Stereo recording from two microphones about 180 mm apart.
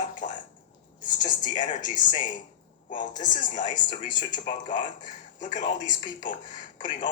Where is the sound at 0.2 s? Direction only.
45° left (ahead or behind).